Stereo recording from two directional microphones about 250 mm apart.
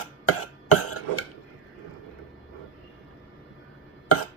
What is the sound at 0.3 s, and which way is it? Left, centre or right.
Cough, left.